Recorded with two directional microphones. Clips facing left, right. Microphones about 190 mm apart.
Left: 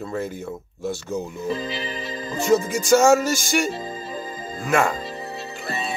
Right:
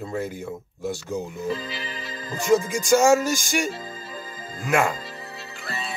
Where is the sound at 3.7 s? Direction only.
20° left (ahead or behind).